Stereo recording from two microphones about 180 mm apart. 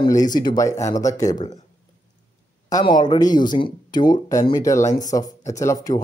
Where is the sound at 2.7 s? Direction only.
25° left (ahead or behind).